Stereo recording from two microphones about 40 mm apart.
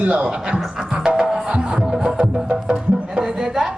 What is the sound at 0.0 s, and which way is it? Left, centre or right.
Speech, right.